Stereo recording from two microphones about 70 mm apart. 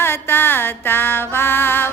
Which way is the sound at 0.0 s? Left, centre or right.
Left.